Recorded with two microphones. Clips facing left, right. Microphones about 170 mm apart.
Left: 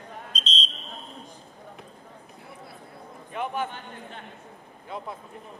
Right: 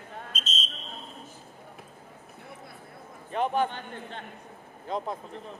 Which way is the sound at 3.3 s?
40° right (ahead or behind).